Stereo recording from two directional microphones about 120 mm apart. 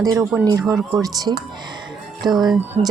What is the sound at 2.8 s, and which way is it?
Speech, 50° right (ahead or behind).